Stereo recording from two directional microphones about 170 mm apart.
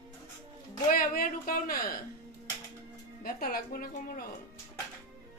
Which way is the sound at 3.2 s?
60° left (ahead or behind).